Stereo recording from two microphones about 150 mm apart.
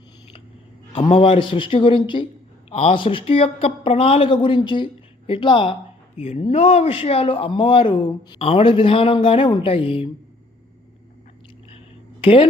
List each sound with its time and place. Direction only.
0.9 s speech: 35° left (ahead or behind)
6.1 s speech: 45° left (ahead or behind)
12.2 s speech: 35° left (ahead or behind)